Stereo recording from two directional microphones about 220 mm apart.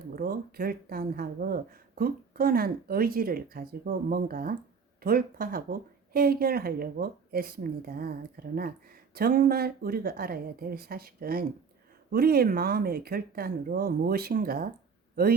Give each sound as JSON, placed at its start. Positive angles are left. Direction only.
{"t": 0.2, "sound": "speech", "side_deg": -40}